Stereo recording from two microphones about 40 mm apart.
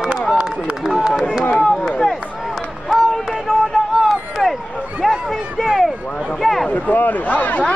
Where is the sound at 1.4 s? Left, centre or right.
Left.